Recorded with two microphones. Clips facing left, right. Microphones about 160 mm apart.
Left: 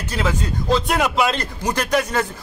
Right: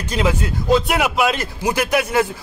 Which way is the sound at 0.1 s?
15° right (ahead or behind).